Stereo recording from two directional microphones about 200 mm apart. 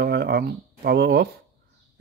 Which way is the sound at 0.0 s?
55° right (ahead or behind).